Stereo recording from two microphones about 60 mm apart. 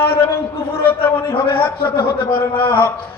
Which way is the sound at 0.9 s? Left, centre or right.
Left.